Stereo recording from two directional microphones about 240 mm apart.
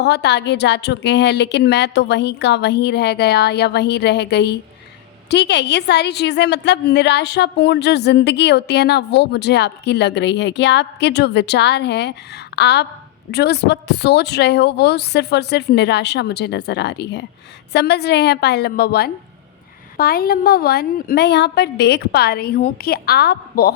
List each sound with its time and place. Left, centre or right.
0.0 s a woman's voice: left